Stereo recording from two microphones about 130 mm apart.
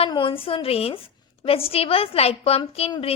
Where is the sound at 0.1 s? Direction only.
40° left (ahead or behind).